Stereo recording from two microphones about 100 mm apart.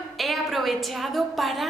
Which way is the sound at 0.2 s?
Centre (ahead or behind).